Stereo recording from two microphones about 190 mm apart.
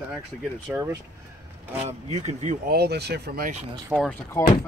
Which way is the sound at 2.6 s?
55° right (ahead or behind).